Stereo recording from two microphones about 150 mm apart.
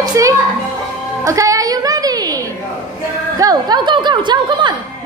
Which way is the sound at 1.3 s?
20° right (ahead or behind).